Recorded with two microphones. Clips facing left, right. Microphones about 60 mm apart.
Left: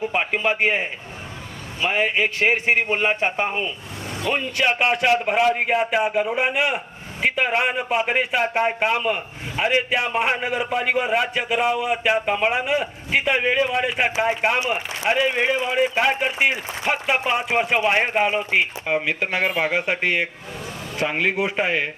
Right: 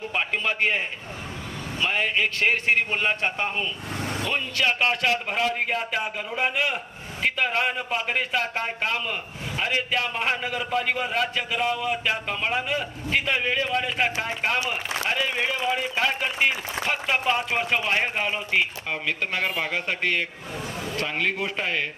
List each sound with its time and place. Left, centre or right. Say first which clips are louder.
0.1 s a man's voice: left 4 dB; centre